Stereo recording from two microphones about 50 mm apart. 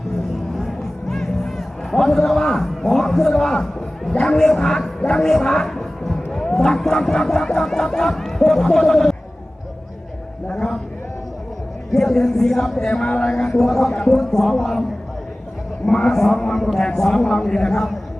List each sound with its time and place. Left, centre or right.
0.5 s music: centre
4.1 s speech: centre
10.5 s a man's voice: centre
11.9 s speech: centre
15.9 s speech: centre